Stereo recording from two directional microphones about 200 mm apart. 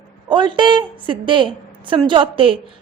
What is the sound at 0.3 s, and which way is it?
A woman's voice, 25° right (ahead or behind).